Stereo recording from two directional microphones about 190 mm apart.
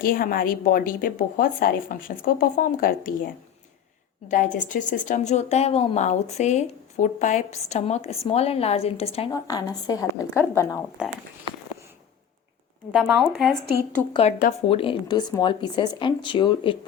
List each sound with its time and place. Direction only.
0.0 s a woman's voice: 50° left (ahead or behind)
4.7 s a woman's voice: 40° left (ahead or behind)
9.3 s speech: 20° left (ahead or behind)
11.0 s speech: 5° right (ahead or behind)
12.9 s speech: centre (ahead or behind)
14.1 s a woman's voice: 30° left (ahead or behind)